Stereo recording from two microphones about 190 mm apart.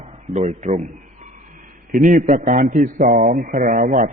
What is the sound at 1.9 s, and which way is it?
A man's voice, 45° right (ahead or behind).